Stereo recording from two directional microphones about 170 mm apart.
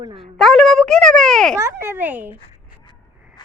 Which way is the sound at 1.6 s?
15° right (ahead or behind).